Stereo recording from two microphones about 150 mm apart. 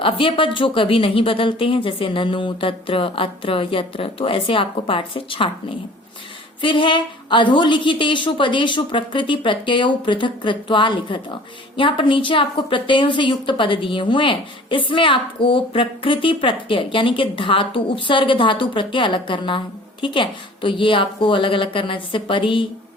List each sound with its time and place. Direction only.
0.0 s a woman's voice: 35° left (ahead or behind)